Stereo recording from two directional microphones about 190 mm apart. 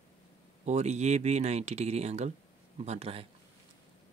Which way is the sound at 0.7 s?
35° right (ahead or behind).